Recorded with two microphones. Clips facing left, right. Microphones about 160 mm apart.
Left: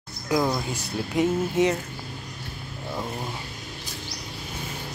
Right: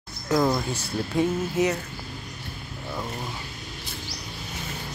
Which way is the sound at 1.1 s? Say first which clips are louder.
Left 2 dB; 25° left (ahead or behind).